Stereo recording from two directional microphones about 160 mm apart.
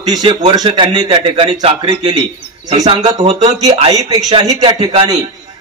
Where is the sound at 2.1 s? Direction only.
30° right (ahead or behind).